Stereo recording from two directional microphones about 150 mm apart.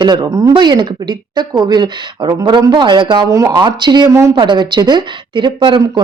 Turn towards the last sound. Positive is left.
turn(degrees=-30)  # may be behind; listen again after turning